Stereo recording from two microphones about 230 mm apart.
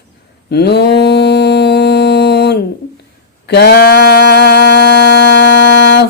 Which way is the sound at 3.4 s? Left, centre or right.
Left.